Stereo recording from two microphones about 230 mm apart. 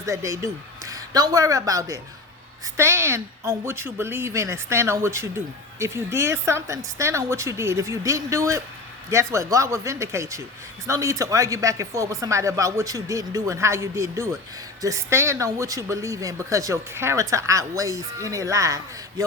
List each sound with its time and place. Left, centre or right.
0.0 s speech: centre